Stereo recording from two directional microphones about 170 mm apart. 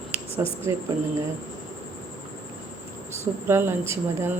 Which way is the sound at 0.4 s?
15° right (ahead or behind).